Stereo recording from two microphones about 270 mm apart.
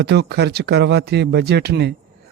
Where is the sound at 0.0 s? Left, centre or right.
Right.